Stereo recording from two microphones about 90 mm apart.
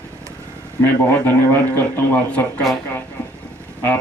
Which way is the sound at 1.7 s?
20° left (ahead or behind).